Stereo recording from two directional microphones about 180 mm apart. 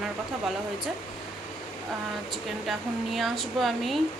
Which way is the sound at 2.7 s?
Centre (ahead or behind).